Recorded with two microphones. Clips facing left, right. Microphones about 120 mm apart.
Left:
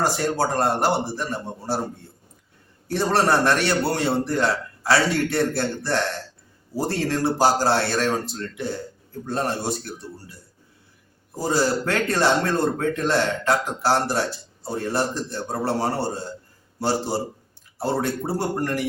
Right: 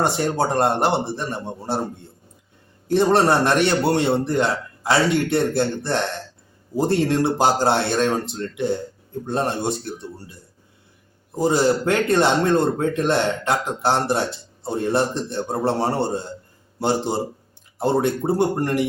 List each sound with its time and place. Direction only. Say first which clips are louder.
0.0 s speech: right 2 dB; 25° right (ahead or behind)
2.8 s speech: right 4 dB; 20° right (ahead or behind)
11.3 s speech: right 4 dB; 20° right (ahead or behind)